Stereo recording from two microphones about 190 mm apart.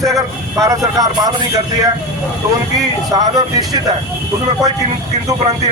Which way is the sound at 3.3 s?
20° right (ahead or behind).